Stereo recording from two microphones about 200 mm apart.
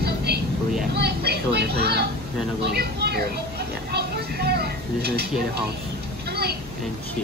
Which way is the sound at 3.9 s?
50° right (ahead or behind).